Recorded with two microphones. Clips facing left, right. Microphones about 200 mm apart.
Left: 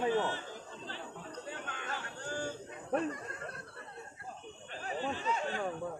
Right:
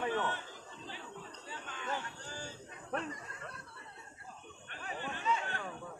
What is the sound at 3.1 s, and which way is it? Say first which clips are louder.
Snicker: left 5 dB; 55° left (ahead or behind).